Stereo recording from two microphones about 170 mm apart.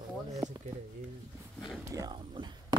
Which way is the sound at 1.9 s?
25° right (ahead or behind).